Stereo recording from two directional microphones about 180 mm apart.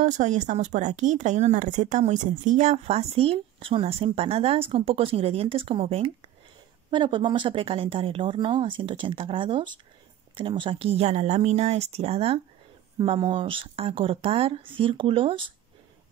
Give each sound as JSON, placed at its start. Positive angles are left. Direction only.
{"t": 0.0, "sound": "speech", "side_deg": -45}